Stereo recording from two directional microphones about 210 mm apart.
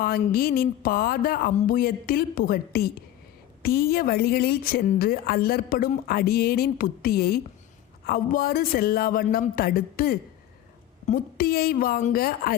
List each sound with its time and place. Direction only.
0.0 s a woman's voice: 45° left (ahead or behind)